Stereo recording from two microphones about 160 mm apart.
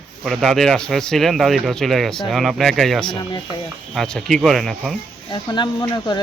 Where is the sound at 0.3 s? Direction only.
Centre (ahead or behind).